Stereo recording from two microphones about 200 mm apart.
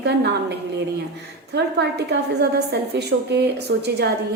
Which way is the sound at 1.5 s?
55° right (ahead or behind).